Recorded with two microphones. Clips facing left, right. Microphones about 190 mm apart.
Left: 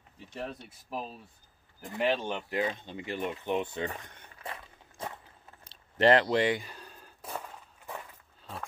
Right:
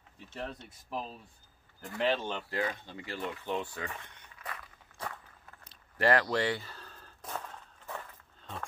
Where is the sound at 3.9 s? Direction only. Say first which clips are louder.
Left 3 dB; 40° left (ahead or behind).